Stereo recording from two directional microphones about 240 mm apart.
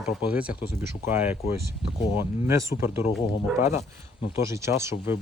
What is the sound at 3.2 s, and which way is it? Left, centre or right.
Speech, left.